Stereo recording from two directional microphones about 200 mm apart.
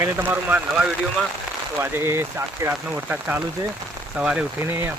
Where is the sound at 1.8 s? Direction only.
10° right (ahead or behind).